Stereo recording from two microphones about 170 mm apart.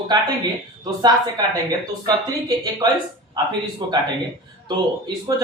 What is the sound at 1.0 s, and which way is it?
Speech, 25° right (ahead or behind).